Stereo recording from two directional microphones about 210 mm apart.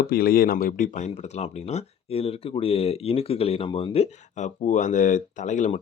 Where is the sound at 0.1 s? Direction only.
45° left (ahead or behind).